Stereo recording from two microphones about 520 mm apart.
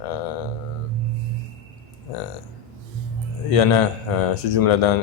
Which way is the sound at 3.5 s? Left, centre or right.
Left.